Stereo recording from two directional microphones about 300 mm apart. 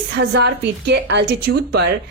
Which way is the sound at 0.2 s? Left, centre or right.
Right.